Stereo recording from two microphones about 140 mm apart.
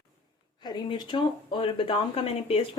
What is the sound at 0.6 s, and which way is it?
Speech, 30° left (ahead or behind).